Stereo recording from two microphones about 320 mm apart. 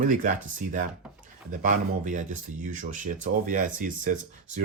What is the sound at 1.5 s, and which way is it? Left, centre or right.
Speech, right.